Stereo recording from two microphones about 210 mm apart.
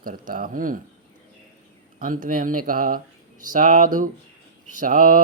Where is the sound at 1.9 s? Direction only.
40° right (ahead or behind).